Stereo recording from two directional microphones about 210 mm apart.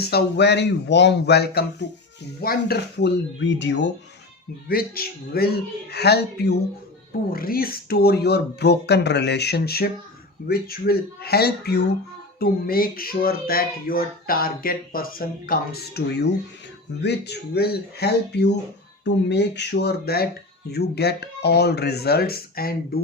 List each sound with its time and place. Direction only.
0.0 s speech: 50° left (ahead or behind)
3.6 s speech: 60° left (ahead or behind)
4.7 s speech: 45° left (ahead or behind)